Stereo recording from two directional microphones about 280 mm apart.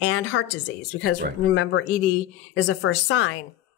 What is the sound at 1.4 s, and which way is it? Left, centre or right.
A woman's voice, left.